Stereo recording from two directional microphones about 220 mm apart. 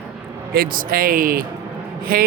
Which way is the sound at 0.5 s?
40° right (ahead or behind).